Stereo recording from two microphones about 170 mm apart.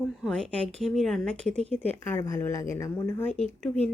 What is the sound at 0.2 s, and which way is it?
Speech, 5° left (ahead or behind).